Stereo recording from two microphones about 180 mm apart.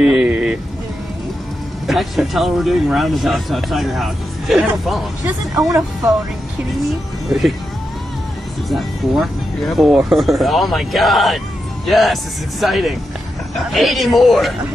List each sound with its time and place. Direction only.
0.0 s vehicle: 5° right (ahead or behind)
1.9 s speech: centre (ahead or behind)
7.2 s speech: centre (ahead or behind)
8.6 s speech: centre (ahead or behind)